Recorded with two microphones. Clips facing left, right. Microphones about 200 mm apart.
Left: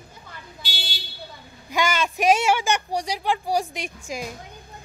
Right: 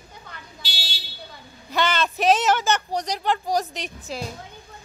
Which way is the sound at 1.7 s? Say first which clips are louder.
Even; 10° left (ahead or behind).